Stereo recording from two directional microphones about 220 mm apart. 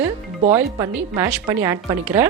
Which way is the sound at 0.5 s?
15° right (ahead or behind).